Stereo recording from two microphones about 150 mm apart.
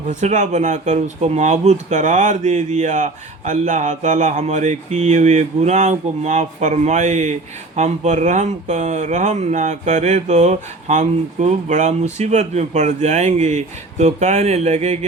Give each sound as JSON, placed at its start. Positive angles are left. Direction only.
{"t": 0.1, "sound": "speech", "side_deg": -50}